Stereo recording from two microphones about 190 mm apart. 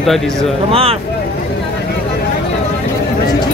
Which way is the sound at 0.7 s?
30° right (ahead or behind).